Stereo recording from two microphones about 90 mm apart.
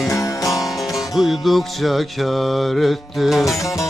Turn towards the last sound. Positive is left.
turn(degrees=35)  # may be behind; listen again after turning